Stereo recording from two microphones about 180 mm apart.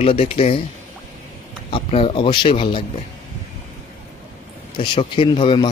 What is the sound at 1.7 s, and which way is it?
A man's voice, 30° left (ahead or behind).